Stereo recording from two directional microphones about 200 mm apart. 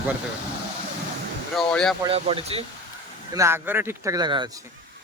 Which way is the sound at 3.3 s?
15° right (ahead or behind).